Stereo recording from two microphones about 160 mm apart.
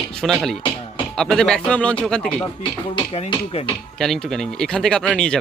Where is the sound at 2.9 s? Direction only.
40° left (ahead or behind).